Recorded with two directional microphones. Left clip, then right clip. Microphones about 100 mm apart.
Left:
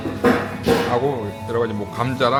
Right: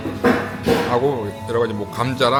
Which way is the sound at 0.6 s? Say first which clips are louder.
Even; 5° left (ahead or behind).